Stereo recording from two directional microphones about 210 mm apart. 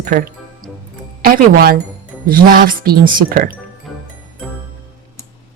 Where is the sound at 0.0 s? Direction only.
45° right (ahead or behind).